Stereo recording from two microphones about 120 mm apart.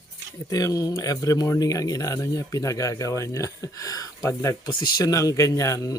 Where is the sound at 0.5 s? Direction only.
30° left (ahead or behind).